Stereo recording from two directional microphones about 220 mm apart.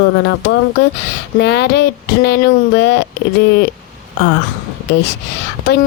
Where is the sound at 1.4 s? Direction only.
50° left (ahead or behind).